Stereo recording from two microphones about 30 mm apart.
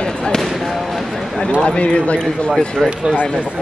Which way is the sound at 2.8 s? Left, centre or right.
Left.